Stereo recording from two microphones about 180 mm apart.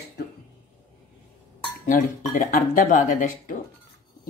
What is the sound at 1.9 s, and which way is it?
Speech, 50° left (ahead or behind).